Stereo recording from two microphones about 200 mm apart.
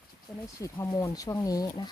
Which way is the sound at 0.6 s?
15° left (ahead or behind).